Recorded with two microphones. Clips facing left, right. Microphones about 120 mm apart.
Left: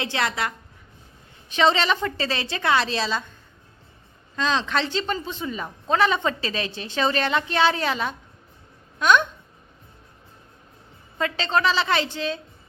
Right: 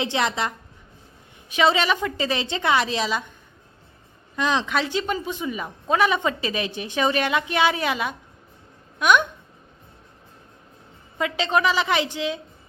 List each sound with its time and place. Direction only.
0.0 s a woman's voice: 20° right (ahead or behind)
4.4 s speech: 15° right (ahead or behind)
11.2 s speech: 15° right (ahead or behind)